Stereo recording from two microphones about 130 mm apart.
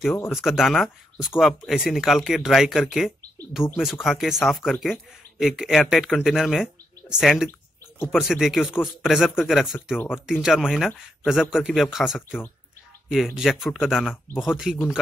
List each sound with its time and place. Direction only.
0.1 s speech: 20° left (ahead or behind)
0.4 s speech: 5° right (ahead or behind)
9.9 s speech: 15° left (ahead or behind)
10.2 s speech: 5° right (ahead or behind)